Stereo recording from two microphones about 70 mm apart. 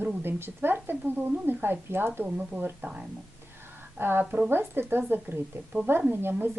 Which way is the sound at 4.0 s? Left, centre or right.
Right.